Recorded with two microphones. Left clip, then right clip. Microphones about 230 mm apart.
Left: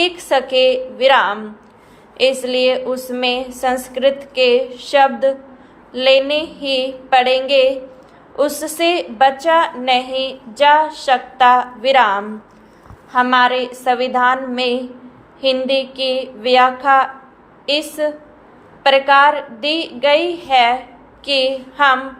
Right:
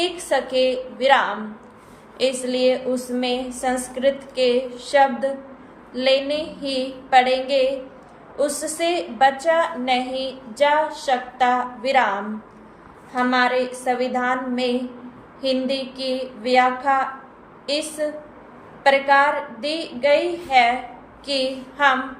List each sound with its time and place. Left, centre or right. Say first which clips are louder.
0.3 s a woman's voice: left 7 dB; centre
2.4 s a woman's voice: left 4 dB; centre
13.1 s a woman's voice: left 6 dB; centre